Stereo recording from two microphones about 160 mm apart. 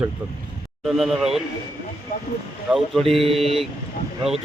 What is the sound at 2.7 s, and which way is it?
Speech, centre (ahead or behind).